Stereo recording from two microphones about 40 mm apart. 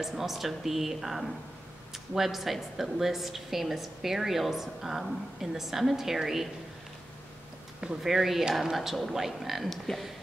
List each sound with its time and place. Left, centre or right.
0.0 s a woman's voice: centre
7.8 s speech: centre
8.1 s a woman's voice: centre
9.7 s speech: centre